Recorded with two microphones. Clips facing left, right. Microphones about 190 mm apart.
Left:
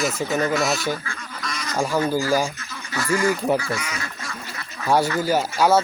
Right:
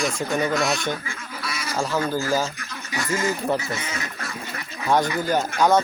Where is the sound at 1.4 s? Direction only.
5° right (ahead or behind).